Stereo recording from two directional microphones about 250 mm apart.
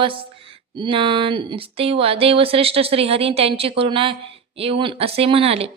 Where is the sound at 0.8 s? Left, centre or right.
Right.